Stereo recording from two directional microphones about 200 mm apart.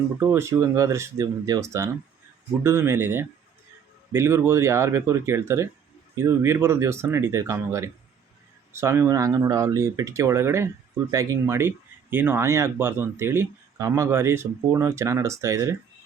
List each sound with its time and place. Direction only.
0.2 s speech: 10° right (ahead or behind)